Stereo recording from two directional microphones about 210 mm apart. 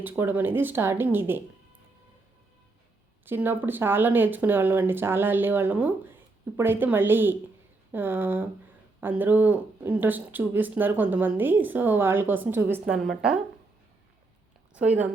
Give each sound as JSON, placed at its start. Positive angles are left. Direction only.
{"t": 0.0, "sound": "speech", "side_deg": -10}
{"t": 3.2, "sound": "speech", "side_deg": -10}
{"t": 14.7, "sound": "a woman's voice", "side_deg": -5}